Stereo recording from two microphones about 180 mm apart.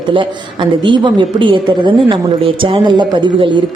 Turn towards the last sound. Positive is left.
turn(degrees=-25)  # may be behind; listen again after turning